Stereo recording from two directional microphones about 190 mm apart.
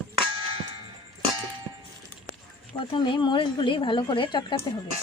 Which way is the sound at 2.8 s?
25° left (ahead or behind).